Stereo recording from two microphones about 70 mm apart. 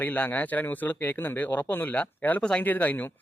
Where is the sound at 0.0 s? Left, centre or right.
Left.